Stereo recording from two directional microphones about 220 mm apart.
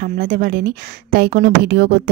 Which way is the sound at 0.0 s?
40° right (ahead or behind).